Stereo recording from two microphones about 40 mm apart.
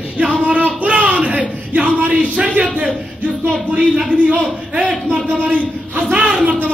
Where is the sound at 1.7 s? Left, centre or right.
Right.